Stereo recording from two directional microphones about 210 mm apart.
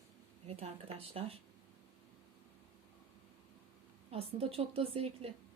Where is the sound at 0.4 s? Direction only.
30° right (ahead or behind).